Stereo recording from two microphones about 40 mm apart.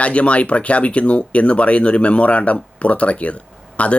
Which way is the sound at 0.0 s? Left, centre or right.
Left.